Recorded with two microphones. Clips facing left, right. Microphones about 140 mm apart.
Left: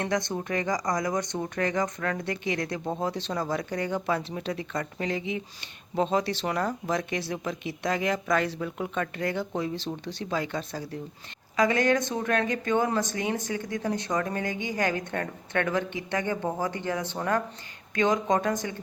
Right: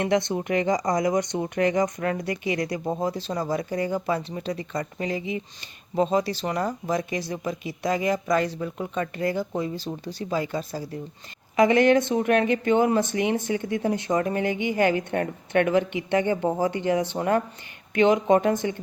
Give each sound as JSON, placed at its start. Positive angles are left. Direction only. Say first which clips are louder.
{"t": 0.0, "sound": "speech", "louder": "right 5 dB", "side_deg": -20}
{"t": 11.5, "sound": "speech", "louder": "right 6 dB", "side_deg": -20}